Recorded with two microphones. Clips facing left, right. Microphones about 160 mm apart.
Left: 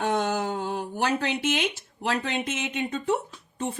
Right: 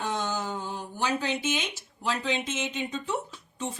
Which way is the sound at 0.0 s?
60° left (ahead or behind).